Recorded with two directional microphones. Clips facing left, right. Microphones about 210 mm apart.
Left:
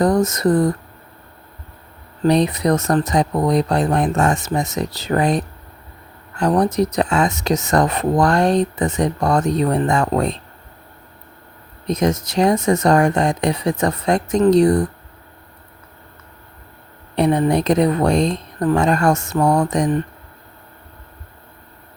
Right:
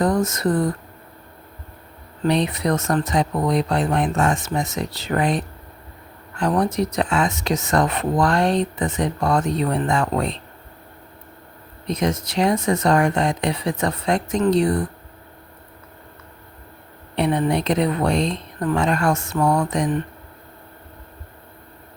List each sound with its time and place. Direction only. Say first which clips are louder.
0.0 s speech: left 4 dB; 40° left (ahead or behind)
2.2 s speech: left 4 dB; 40° left (ahead or behind)
11.9 s speech: left 4 dB; 45° left (ahead or behind)
17.2 s speech: left 4 dB; 40° left (ahead or behind)